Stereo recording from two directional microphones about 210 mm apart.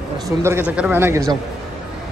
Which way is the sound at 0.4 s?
10° right (ahead or behind).